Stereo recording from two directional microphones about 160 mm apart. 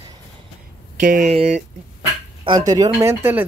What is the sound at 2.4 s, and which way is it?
Speech, 25° right (ahead or behind).